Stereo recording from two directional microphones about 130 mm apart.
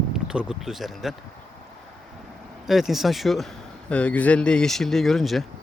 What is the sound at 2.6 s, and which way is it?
A man's voice, centre (ahead or behind).